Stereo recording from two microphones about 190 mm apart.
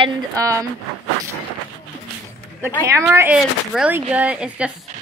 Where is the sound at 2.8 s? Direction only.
15° right (ahead or behind).